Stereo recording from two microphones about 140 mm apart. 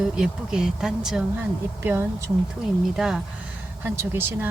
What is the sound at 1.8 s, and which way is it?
Speech, 15° right (ahead or behind).